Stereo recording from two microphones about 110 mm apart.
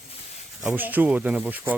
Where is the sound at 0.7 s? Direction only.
15° right (ahead or behind).